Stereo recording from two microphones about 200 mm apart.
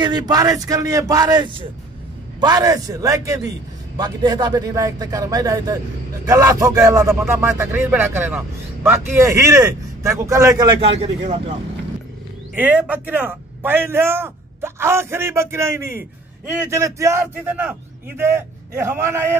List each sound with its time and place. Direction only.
0.0 s speech: 20° right (ahead or behind)
10.8 s speech: 30° right (ahead or behind)
12.5 s speech: 10° right (ahead or behind)